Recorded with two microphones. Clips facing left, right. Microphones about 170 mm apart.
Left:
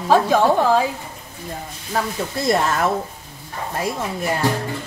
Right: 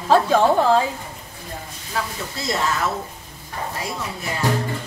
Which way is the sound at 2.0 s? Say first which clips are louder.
Left 4 dB; 45° left (ahead or behind).